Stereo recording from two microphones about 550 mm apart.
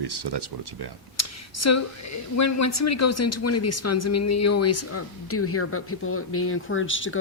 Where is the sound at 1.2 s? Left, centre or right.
Left.